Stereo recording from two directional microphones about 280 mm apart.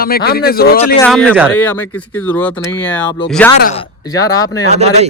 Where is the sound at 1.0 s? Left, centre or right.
Centre.